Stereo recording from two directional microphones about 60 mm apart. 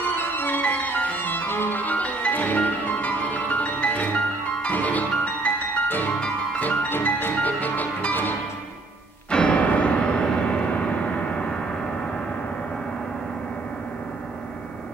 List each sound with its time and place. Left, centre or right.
0.0 s music: left
9.3 s music: centre
9.8 s a sound: centre